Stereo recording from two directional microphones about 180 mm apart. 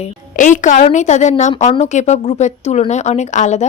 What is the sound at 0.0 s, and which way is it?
A woman's voice, 45° left (ahead or behind).